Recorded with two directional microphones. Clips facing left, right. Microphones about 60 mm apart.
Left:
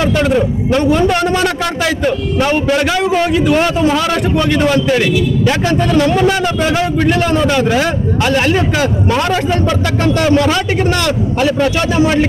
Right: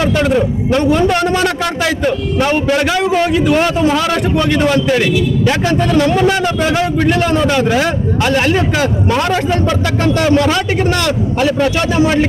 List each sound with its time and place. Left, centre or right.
0.2 s a man's voice: centre